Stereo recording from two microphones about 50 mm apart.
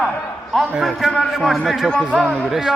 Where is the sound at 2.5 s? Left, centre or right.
Centre.